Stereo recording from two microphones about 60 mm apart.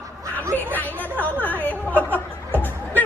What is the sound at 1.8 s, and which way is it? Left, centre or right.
Music, left.